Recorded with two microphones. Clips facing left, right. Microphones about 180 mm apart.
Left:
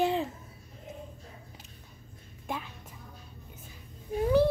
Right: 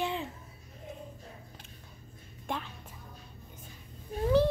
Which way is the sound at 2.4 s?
10° left (ahead or behind).